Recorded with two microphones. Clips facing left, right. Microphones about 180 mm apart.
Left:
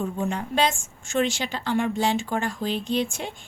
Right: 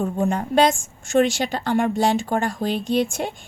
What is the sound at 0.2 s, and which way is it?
A woman's voice, 45° right (ahead or behind).